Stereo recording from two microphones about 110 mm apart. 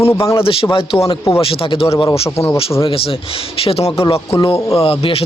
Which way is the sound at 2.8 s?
55° left (ahead or behind).